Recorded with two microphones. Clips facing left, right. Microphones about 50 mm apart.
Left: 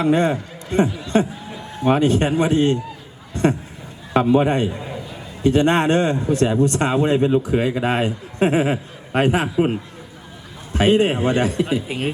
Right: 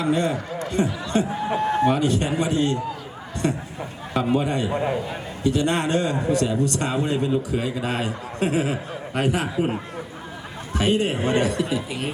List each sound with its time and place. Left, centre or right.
0.0 s a man's voice: left
1.3 s a sound: right
1.9 s a man's voice: left
4.7 s a man's voice: right
5.4 s speech: left
10.8 s speech: left